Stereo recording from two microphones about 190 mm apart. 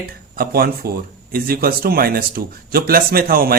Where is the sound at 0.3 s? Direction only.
50° right (ahead or behind).